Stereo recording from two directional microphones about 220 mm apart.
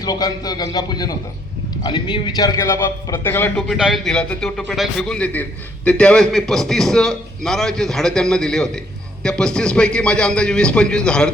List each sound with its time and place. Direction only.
0.0 s a man's voice: 15° left (ahead or behind)